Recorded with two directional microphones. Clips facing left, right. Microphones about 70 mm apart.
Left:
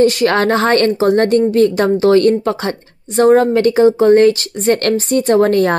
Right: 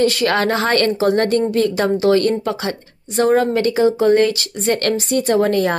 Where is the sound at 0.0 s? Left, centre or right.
Left.